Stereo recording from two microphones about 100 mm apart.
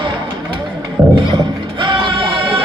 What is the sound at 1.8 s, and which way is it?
Music, 55° right (ahead or behind).